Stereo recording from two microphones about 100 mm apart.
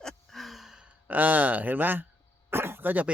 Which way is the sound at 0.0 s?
Centre (ahead or behind).